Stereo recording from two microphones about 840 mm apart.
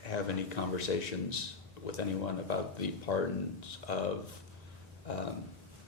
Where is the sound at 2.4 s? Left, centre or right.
Left.